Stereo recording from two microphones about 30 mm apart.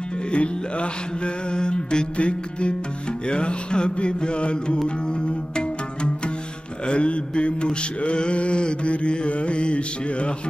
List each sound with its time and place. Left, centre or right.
0.3 s mantra: left
4.8 s music: left
6.9 s mantra: left